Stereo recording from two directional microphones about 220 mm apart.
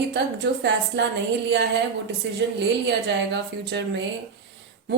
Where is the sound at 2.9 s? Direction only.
50° right (ahead or behind).